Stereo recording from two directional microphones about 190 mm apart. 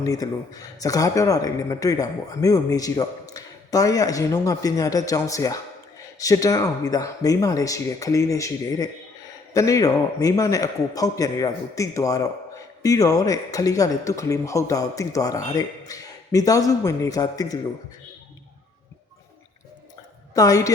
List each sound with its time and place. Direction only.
0.0 s a man's voice: 20° left (ahead or behind)
20.3 s speech: 20° left (ahead or behind)